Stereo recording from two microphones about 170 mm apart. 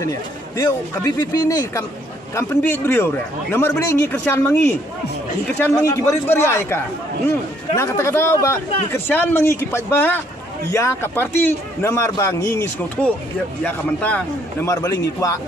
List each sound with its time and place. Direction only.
0.0 s a man's voice: 20° left (ahead or behind)